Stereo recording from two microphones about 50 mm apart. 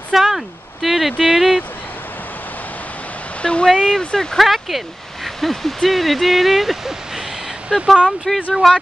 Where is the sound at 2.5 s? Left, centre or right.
Left.